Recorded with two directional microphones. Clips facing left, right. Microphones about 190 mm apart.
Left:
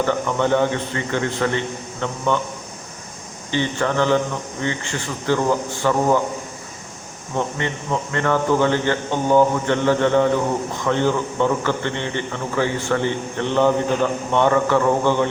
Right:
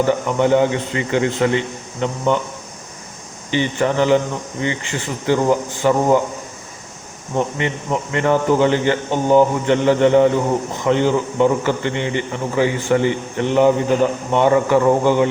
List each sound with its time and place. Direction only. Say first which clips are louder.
0.0 s a man's voice: right 3 dB; 15° right (ahead or behind)
3.5 s a man's voice: right 3 dB; 15° right (ahead or behind)
7.3 s a man's voice: right 3 dB; 15° right (ahead or behind)